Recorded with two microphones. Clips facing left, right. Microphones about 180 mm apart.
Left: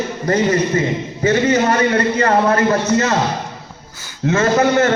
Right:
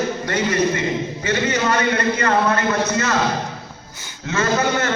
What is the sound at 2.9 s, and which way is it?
Speech, 20° left (ahead or behind).